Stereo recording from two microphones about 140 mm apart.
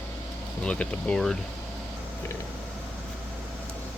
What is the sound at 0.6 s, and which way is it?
Speech, 10° left (ahead or behind).